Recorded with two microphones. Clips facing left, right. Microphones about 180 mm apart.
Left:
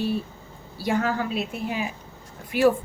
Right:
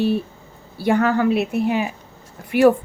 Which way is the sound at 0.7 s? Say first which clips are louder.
Right 7 dB; 60° right (ahead or behind).